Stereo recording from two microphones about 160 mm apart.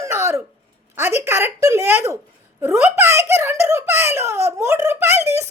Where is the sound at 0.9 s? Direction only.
15° right (ahead or behind).